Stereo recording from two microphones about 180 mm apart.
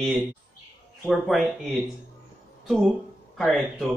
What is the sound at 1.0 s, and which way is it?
Speech, centre (ahead or behind).